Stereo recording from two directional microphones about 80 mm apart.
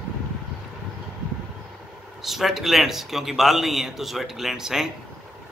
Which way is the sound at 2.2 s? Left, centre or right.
Centre.